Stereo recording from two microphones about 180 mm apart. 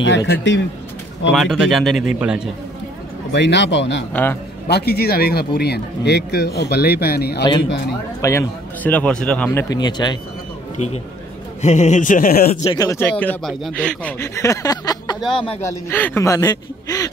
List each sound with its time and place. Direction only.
0.0 s speech: 80° left
1.3 s speech: centre (ahead or behind)
3.3 s a man's voice: 75° left (ahead or behind)
4.1 s speech: 10° left (ahead or behind)
4.6 s speech: 60° left (ahead or behind)
8.2 s speech: 15° left (ahead or behind)
11.6 s a man's voice: 40° left (ahead or behind)
12.7 s speech: 15° left (ahead or behind)
13.2 s a man's voice: 5° left (ahead or behind); by 15.6 s 30° left (ahead or behind)
15.6 s speech: 10° left (ahead or behind)